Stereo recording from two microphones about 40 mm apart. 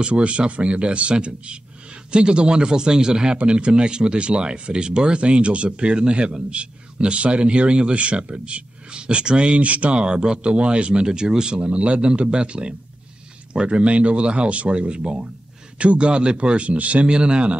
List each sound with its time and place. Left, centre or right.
0.0 s speech: right
17.1 s speech: right